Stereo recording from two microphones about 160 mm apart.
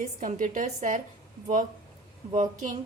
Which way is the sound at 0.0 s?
50° right (ahead or behind).